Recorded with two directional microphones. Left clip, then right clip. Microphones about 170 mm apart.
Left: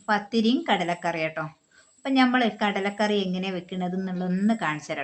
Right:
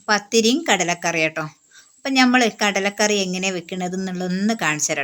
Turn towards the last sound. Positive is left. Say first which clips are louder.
# right 7 dB
turn(degrees=-30)  # may be behind; listen again after turning